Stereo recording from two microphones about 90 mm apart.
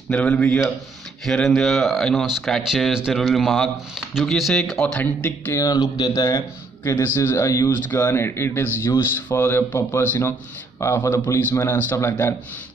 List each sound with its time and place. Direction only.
0.1 s a man's voice: 15° left (ahead or behind)
5.0 s a man's voice: 25° left (ahead or behind)
5.6 s speech: 50° left (ahead or behind)
6.8 s a man's voice: 25° left (ahead or behind)
7.9 s a man's voice: 25° left (ahead or behind)